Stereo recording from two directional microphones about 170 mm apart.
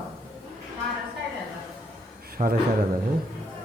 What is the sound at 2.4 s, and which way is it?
Speech, 45° right (ahead or behind).